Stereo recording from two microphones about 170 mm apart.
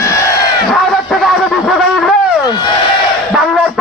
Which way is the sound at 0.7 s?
Centre (ahead or behind).